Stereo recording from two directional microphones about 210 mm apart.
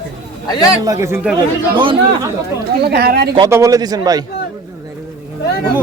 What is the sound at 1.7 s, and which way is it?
Speech, 25° right (ahead or behind).